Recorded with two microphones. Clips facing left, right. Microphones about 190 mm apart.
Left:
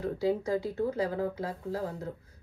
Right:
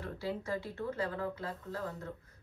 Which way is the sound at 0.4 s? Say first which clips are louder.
Left 7 dB; 15° left (ahead or behind).